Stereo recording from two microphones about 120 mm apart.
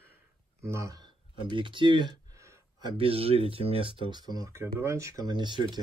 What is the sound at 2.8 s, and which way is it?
Speech, 50° right (ahead or behind).